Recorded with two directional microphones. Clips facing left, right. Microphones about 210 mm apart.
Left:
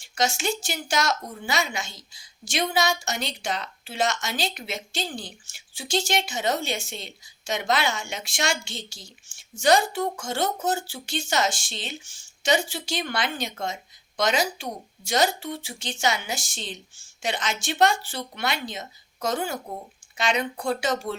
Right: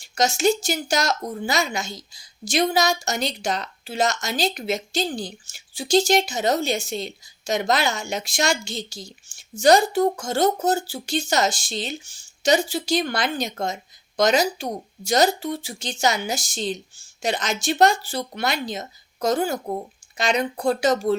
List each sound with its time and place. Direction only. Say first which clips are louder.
0.0 s a woman's voice: right 6 dB; 40° right (ahead or behind)